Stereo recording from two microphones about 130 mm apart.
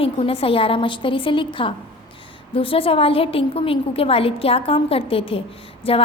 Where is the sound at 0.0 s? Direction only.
45° left (ahead or behind).